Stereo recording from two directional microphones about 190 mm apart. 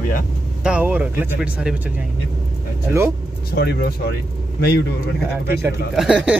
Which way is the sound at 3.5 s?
60° left (ahead or behind).